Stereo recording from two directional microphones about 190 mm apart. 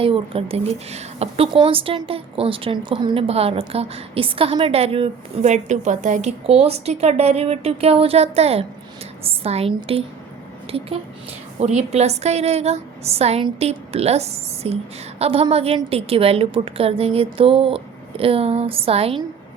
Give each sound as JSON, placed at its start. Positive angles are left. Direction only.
{"t": 0.0, "sound": "a woman's voice", "side_deg": -30}